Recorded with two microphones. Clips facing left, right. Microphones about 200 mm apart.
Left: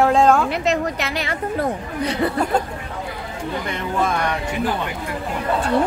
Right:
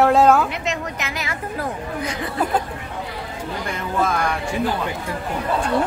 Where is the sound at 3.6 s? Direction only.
5° right (ahead or behind).